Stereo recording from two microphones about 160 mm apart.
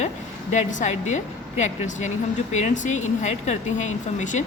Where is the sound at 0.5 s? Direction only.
50° left (ahead or behind).